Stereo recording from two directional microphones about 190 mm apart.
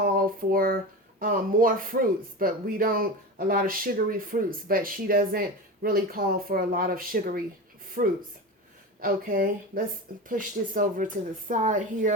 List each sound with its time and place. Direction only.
0.0 s speech: 50° right (ahead or behind)